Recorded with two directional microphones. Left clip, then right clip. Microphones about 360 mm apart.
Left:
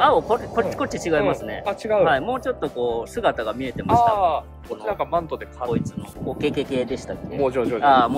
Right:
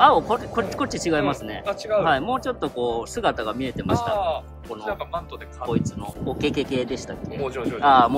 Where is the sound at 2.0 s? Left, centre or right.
Centre.